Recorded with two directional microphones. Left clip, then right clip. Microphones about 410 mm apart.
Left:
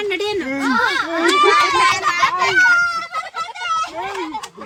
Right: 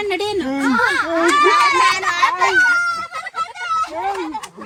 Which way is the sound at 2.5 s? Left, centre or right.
Centre.